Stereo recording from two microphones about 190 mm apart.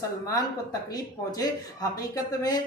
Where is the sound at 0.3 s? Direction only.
20° left (ahead or behind).